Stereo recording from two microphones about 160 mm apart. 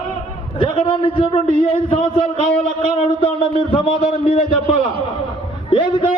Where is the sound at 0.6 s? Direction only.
35° left (ahead or behind).